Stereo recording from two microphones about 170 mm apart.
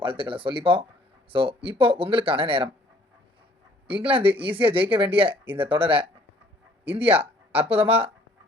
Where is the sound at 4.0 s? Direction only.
30° right (ahead or behind).